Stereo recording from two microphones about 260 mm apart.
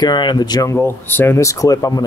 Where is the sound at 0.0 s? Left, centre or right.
Centre.